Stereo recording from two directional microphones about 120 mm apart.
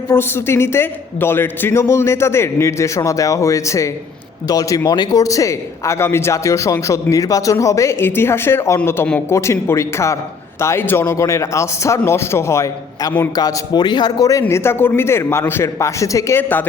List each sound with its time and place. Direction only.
0.1 s a man's voice: 20° left (ahead or behind)